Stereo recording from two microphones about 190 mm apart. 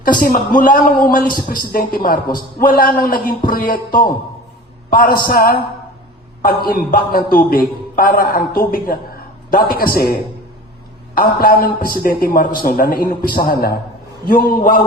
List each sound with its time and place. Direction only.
0.0 s a man's voice: 50° left (ahead or behind)
6.7 s a man's voice: 50° left (ahead or behind)